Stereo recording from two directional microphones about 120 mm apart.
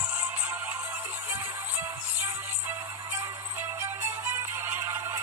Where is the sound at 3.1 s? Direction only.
20° right (ahead or behind).